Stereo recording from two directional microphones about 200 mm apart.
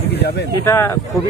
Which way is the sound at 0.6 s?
10° left (ahead or behind).